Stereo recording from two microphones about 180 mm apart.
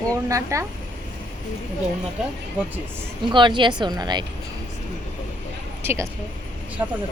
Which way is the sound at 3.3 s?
25° right (ahead or behind).